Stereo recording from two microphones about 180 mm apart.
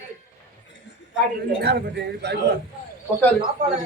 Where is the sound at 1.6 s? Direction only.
65° right (ahead or behind).